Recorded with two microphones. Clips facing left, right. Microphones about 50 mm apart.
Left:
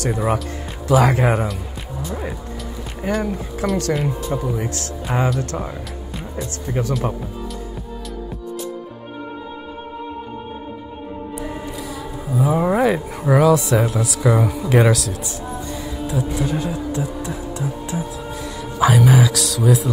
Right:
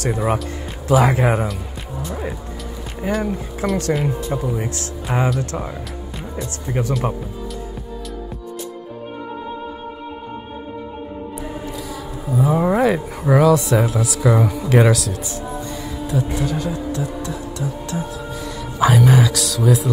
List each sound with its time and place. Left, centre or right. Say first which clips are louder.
0.1 s speech: right 1 dB; centre
11.9 s speech: right 2 dB; centre
16.4 s speech: even; centre
18.8 s speech: even; centre